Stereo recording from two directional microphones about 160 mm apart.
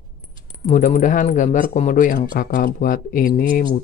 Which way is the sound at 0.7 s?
55° left (ahead or behind).